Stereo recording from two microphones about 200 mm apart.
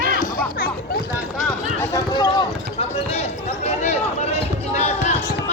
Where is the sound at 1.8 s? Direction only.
20° left (ahead or behind).